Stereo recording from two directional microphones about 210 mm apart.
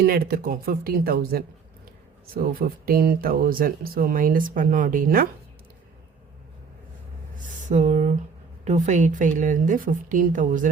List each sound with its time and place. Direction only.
0.0 s speech: 45° right (ahead or behind)
7.3 s a sound: 35° right (ahead or behind)
8.6 s a woman's voice: 35° right (ahead or behind)